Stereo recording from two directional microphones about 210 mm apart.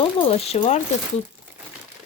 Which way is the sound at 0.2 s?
30° left (ahead or behind).